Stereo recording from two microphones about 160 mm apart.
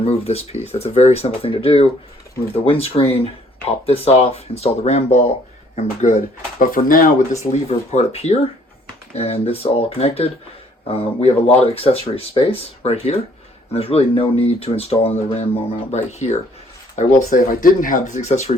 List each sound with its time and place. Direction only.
0.0 s speech: 40° left (ahead or behind)